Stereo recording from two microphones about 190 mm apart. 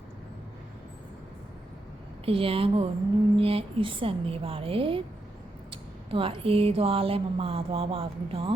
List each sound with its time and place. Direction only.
2.2 s speech: 30° right (ahead or behind)